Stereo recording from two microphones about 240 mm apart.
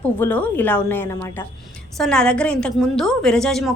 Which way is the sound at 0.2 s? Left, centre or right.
Centre.